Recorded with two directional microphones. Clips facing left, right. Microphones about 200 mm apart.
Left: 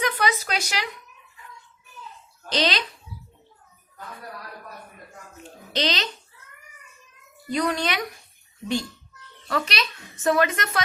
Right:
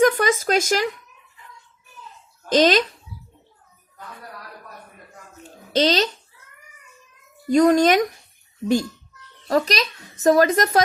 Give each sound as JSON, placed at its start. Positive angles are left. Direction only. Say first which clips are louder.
{"t": 0.0, "sound": "speech", "louder": "right 8 dB", "side_deg": -45}
{"t": 2.5, "sound": "speech", "louder": "right 9 dB", "side_deg": -45}
{"t": 5.7, "sound": "a woman's voice", "louder": "right 8 dB", "side_deg": -40}
{"t": 7.4, "sound": "a woman's voice", "louder": "right 10 dB", "side_deg": -45}